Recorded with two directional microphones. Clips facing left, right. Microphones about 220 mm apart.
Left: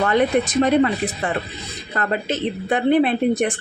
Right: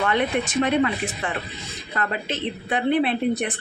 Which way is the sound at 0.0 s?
40° left (ahead or behind).